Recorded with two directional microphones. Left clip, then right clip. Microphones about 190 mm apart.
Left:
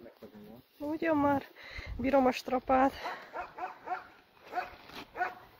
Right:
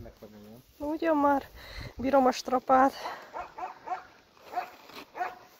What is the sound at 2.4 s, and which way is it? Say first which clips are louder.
Speech: right 5 dB; 10° right (ahead or behind).